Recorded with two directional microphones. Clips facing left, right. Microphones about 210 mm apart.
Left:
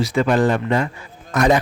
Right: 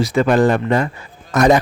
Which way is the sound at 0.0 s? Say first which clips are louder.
Right 3 dB; 45° right (ahead or behind).